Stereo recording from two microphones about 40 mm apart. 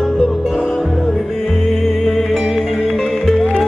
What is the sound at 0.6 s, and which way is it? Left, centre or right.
Music, centre.